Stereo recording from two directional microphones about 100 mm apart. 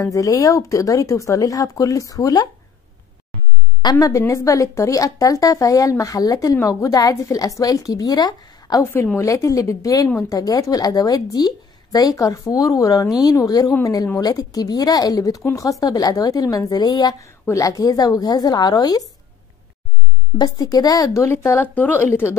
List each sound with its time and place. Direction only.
0.0 s speech: 35° left (ahead or behind)
3.9 s speech: 35° left (ahead or behind)
8.9 s speech: 20° left (ahead or behind)
9.2 s speech: 30° left (ahead or behind)
17.2 s speech: 30° left (ahead or behind)
20.3 s speech: 40° left (ahead or behind); by 22.3 s 25° left (ahead or behind)